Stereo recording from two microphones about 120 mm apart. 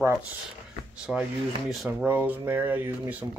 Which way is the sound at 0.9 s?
10° right (ahead or behind).